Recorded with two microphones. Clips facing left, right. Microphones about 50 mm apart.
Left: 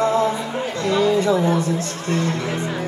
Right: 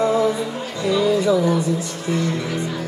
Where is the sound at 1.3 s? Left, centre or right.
Left.